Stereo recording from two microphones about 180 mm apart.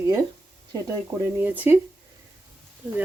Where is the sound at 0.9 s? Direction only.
10° right (ahead or behind).